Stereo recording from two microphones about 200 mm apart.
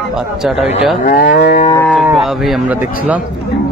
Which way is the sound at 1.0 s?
40° left (ahead or behind).